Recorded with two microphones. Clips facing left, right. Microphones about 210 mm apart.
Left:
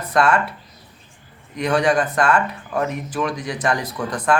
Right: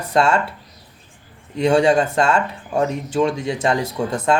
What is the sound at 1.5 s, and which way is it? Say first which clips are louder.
Speech: right 4 dB; 25° right (ahead or behind).